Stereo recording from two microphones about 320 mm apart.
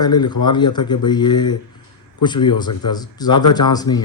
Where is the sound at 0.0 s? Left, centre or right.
Centre.